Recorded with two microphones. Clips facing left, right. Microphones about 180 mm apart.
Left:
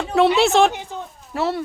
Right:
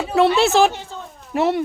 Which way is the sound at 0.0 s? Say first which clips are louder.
Even; 5° right (ahead or behind).